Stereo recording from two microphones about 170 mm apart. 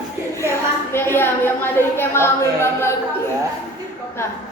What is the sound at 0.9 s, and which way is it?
A woman's voice, 15° left (ahead or behind).